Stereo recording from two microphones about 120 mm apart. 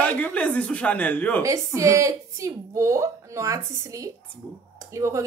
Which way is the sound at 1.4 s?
25° right (ahead or behind).